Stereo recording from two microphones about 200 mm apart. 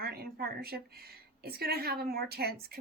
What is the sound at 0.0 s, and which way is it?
A woman's voice, 50° right (ahead or behind).